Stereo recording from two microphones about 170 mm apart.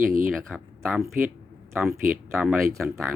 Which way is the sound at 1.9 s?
55° right (ahead or behind).